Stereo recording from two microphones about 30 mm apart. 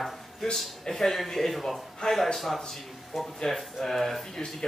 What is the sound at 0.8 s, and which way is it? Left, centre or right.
A man's voice, centre.